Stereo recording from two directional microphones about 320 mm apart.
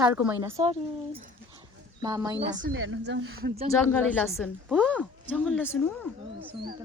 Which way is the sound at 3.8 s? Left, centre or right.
Centre.